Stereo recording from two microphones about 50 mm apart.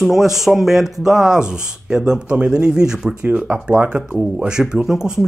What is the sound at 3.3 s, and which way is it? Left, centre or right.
Speech, right.